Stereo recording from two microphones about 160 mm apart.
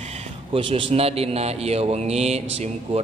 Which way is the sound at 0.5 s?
35° right (ahead or behind).